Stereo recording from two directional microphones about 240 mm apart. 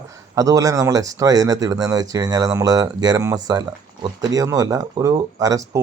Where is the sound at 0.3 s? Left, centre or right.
Centre.